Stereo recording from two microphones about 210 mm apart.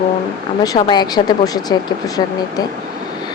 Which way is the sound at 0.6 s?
20° left (ahead or behind).